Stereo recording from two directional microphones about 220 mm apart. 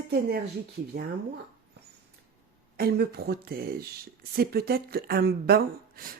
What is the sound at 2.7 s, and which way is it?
Speech, 45° right (ahead or behind).